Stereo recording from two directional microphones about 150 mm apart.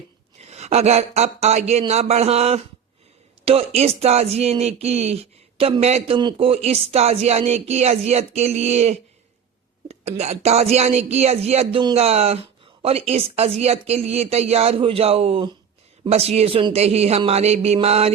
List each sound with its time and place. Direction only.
0.3 s speech: 45° right (ahead or behind)